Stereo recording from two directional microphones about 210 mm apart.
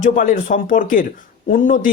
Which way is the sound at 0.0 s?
40° left (ahead or behind).